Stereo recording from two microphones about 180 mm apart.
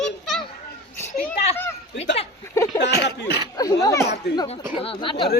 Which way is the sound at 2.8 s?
75° left (ahead or behind).